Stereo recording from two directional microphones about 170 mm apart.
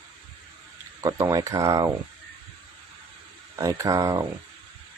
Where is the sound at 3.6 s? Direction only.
20° right (ahead or behind).